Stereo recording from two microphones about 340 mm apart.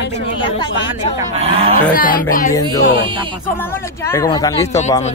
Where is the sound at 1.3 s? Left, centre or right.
Centre.